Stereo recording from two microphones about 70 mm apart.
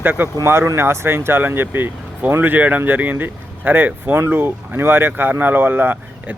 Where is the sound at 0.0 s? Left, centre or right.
Right.